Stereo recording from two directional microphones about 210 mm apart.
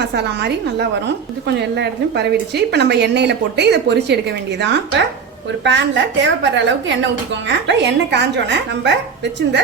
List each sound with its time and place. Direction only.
0.0 s a woman's voice: 55° right (ahead or behind)